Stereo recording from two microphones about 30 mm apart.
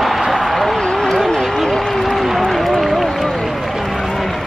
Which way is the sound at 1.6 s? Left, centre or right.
Centre.